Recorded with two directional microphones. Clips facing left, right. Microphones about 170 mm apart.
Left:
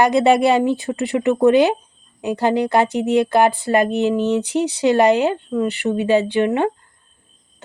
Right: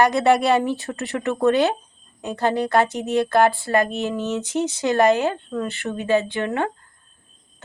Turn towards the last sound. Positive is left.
turn(degrees=20)  # may be behind; listen again after turning